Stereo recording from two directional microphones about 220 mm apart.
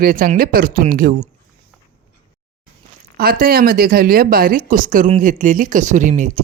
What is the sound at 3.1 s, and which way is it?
Speech, 40° right (ahead or behind).